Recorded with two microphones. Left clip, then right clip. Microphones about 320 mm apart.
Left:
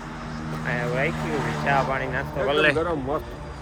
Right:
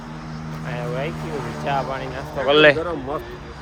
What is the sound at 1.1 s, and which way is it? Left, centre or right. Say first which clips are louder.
Speech: left 2 dB; left.